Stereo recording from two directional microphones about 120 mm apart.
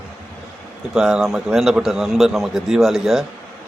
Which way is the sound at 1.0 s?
5° right (ahead or behind).